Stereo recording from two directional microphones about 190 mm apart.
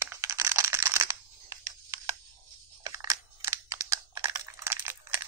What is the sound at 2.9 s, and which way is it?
Computer keyboard, 15° right (ahead or behind).